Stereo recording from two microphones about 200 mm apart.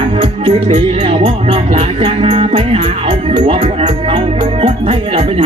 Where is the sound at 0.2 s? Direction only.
35° right (ahead or behind).